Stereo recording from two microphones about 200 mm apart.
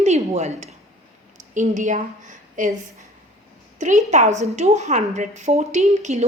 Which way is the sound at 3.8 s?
35° right (ahead or behind).